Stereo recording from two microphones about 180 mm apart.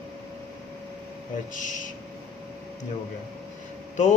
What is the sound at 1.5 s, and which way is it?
Speech, 45° left (ahead or behind).